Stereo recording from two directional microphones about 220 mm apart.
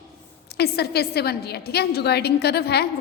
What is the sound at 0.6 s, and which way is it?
A woman's voice, 45° left (ahead or behind).